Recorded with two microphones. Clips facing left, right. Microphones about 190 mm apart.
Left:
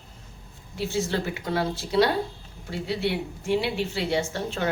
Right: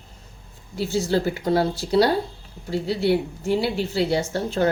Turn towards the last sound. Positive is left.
turn(degrees=-40)  # may be behind; listen again after turning